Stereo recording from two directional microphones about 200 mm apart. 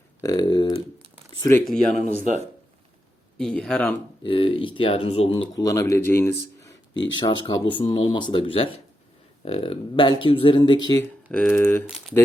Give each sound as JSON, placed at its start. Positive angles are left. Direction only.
{"t": 0.2, "sound": "speech", "side_deg": 20}
{"t": 2.3, "sound": "speech", "side_deg": -40}
{"t": 3.3, "sound": "speech", "side_deg": 5}
{"t": 4.2, "sound": "speech", "side_deg": 25}
{"t": 6.9, "sound": "speech", "side_deg": 70}
{"t": 7.2, "sound": "speech", "side_deg": 20}
{"t": 11.3, "sound": "speech", "side_deg": 5}